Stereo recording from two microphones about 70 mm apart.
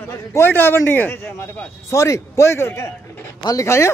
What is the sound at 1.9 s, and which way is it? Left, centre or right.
A man's voice, left.